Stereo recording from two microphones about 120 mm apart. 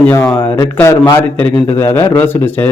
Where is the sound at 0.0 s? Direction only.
15° left (ahead or behind).